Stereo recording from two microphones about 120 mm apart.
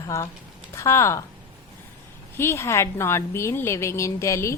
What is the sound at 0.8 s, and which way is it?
Speech, 25° left (ahead or behind).